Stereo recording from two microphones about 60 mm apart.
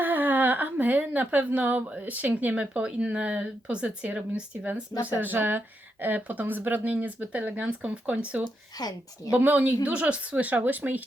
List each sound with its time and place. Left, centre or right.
0.0 s speech: right
8.8 s a woman's voice: left
9.3 s speech: right